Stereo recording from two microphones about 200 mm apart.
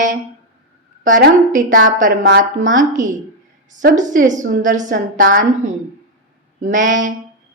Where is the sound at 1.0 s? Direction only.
40° right (ahead or behind).